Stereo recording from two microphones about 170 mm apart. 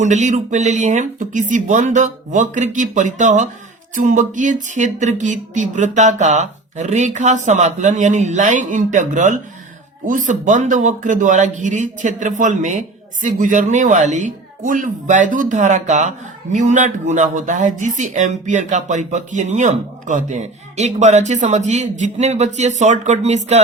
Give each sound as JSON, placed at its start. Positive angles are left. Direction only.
{"t": 0.0, "sound": "speech", "side_deg": -45}